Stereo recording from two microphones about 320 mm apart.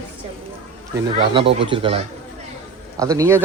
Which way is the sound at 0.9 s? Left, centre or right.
Centre.